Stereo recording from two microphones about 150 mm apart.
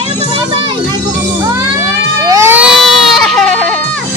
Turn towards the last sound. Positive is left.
turn(degrees=0)  # may be behind; listen again after turning